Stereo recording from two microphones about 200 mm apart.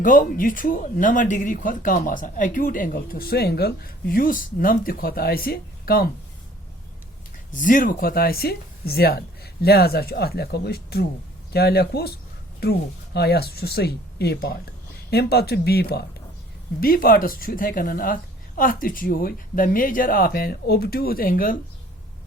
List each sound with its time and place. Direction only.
0.0 s speech: 40° left (ahead or behind)
7.5 s speech: 40° left (ahead or behind)
13.1 s speech: 55° left (ahead or behind)